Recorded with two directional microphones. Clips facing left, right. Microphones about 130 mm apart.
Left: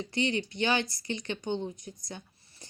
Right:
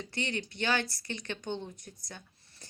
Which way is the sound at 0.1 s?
15° left (ahead or behind).